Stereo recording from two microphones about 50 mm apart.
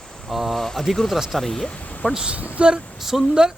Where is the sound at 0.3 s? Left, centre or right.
Centre.